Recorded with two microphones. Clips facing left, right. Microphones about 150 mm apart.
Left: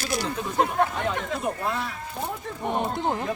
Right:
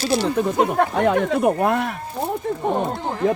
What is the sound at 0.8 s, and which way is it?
Speech, 65° right (ahead or behind).